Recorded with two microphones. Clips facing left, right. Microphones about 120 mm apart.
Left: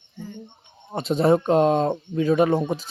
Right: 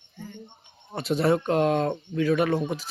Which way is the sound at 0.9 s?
25° left (ahead or behind).